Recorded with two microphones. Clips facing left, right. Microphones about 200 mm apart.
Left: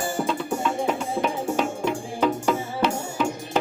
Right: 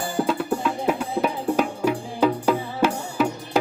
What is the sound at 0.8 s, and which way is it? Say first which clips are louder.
Music: right 1 dB; 5° right (ahead or behind).